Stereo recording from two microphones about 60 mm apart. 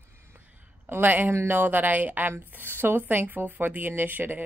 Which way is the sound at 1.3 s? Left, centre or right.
Right.